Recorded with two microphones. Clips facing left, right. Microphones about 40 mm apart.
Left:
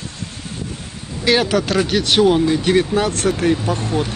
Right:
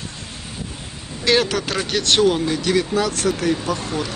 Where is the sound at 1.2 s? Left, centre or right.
Centre.